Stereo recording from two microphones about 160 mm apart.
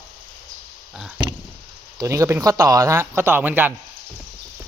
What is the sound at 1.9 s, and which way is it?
Speech, 20° right (ahead or behind).